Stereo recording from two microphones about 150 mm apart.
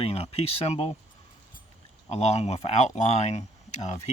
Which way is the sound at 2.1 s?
45° left (ahead or behind).